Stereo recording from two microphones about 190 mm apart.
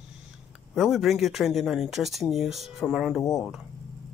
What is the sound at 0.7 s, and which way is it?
Speech, centre (ahead or behind).